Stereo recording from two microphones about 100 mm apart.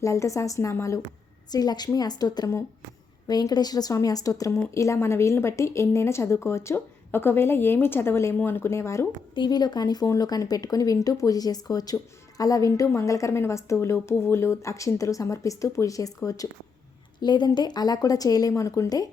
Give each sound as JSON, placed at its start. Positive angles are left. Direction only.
{"t": 0.0, "sound": "a woman's voice", "side_deg": 30}
{"t": 1.5, "sound": "a woman's voice", "side_deg": 40}
{"t": 9.3, "sound": "a woman's voice", "side_deg": 45}
{"t": 17.2, "sound": "a woman's voice", "side_deg": 45}